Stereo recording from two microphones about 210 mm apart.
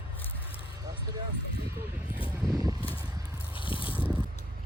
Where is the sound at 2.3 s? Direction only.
15° right (ahead or behind).